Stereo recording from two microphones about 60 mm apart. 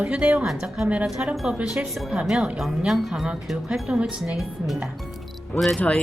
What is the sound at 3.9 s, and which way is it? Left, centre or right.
Speech, centre.